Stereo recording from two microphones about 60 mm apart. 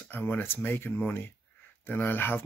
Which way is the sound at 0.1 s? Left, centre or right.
Left.